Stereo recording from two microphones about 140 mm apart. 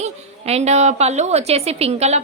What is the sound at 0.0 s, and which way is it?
A woman's voice, 50° right (ahead or behind).